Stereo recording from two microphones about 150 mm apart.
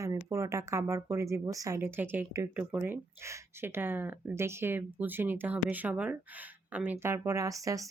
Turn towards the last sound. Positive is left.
turn(degrees=-20)  # may be behind; listen again after turning